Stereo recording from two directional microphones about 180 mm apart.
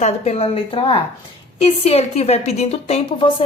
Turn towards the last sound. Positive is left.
turn(degrees=35)  # may be behind; listen again after turning